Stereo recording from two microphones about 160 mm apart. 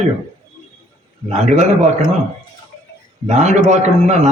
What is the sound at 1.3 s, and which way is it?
Speech, 45° right (ahead or behind).